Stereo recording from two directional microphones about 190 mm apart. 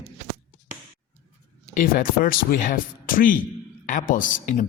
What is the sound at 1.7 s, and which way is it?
A man's voice, 45° left (ahead or behind).